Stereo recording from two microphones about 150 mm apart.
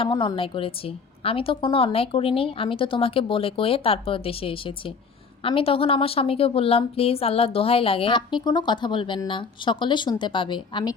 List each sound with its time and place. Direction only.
0.0 s a woman's voice: 35° left (ahead or behind)